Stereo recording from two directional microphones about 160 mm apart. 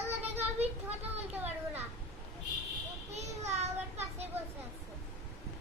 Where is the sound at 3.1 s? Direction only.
45° right (ahead or behind).